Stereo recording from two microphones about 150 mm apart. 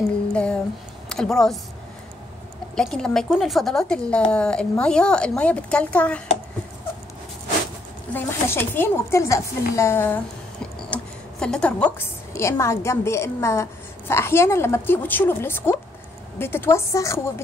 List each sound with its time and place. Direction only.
0.3 s a sound: 5° left (ahead or behind)
1.0 s speech: 5° left (ahead or behind)
2.7 s a woman's voice: 5° left (ahead or behind)
8.1 s speech: 15° left (ahead or behind)